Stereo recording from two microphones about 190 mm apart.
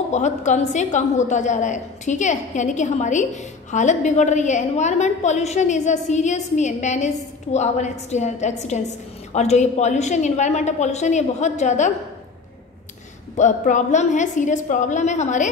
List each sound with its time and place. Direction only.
0.1 s a woman's voice: 40° left (ahead or behind)
13.4 s a woman's voice: 40° left (ahead or behind)